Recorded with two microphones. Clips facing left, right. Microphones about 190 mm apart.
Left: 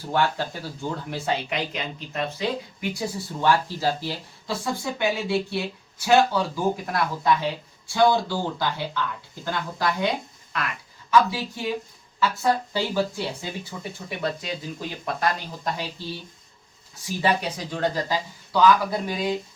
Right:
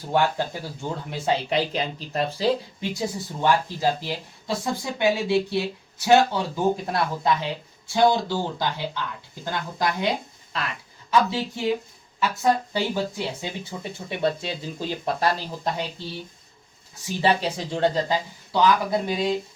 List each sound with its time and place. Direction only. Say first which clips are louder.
0.1 s speech: right 2 dB; 25° right (ahead or behind)
10.5 s speech: even; 30° right (ahead or behind)
17.2 s speech: right 2 dB; 30° right (ahead or behind)